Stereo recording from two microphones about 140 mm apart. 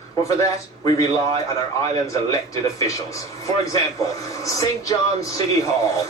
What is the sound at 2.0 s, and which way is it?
Speech, 20° left (ahead or behind).